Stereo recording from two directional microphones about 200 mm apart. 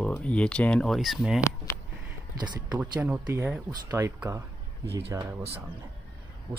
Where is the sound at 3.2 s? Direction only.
15° right (ahead or behind).